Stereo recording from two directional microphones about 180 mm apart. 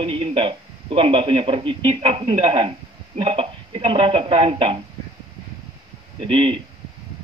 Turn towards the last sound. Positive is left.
turn(degrees=-30)  # may be behind; listen again after turning